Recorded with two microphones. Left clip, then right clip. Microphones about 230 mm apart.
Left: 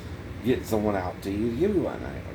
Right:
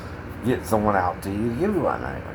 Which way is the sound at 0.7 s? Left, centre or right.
Centre.